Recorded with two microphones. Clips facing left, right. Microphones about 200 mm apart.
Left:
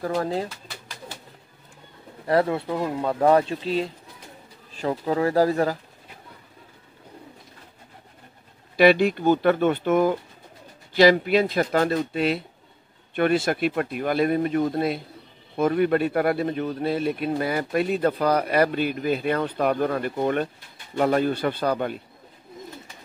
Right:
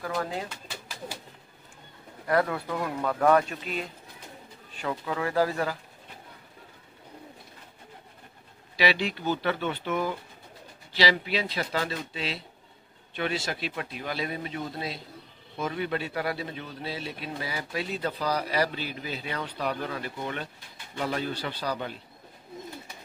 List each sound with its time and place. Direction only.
0.0 s speech: 35° left (ahead or behind)
2.2 s speech: 25° left (ahead or behind)
8.7 s speech: 50° left (ahead or behind)